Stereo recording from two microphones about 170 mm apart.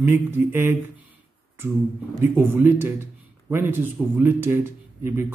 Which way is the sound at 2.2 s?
15° right (ahead or behind).